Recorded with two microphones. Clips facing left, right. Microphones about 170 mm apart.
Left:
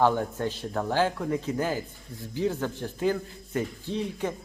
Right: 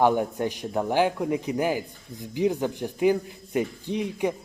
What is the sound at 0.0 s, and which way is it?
Speech, 15° right (ahead or behind).